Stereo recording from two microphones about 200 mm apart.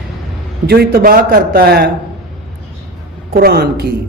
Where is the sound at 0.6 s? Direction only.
50° right (ahead or behind).